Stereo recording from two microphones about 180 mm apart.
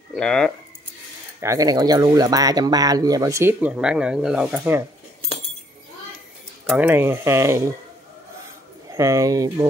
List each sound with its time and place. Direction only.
0.1 s speech: 5° left (ahead or behind)
1.4 s speech: 20° right (ahead or behind)
6.6 s speech: 10° right (ahead or behind)
8.9 s speech: 15° right (ahead or behind)